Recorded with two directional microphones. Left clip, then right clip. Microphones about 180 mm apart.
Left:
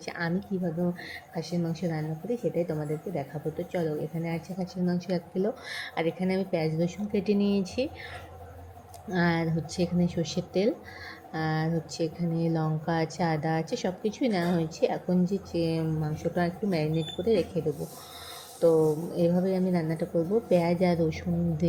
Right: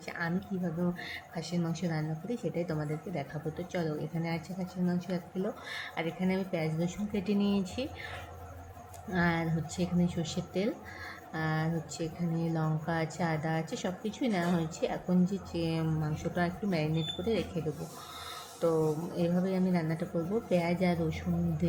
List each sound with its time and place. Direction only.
0.0 s a woman's voice: 20° left (ahead or behind)
9.0 s a woman's voice: 20° left (ahead or behind)
18.6 s a woman's voice: 10° left (ahead or behind)
19.1 s speech: 20° left (ahead or behind)